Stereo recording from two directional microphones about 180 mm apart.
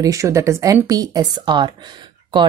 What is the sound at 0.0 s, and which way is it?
Speech, 15° right (ahead or behind).